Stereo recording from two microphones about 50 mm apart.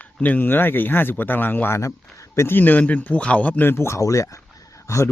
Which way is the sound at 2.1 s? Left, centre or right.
Left.